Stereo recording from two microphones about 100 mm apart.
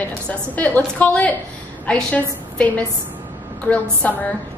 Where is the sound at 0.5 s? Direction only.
15° left (ahead or behind).